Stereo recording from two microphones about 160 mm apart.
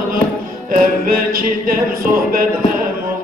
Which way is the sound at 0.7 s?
65° right (ahead or behind).